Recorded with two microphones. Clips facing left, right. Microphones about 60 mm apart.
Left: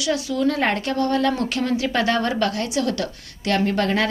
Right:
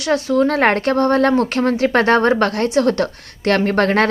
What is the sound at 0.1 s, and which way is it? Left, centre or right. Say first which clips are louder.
Speech: right 6 dB; right.